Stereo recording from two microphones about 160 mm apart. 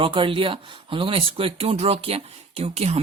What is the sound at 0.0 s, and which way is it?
Speech, 30° right (ahead or behind).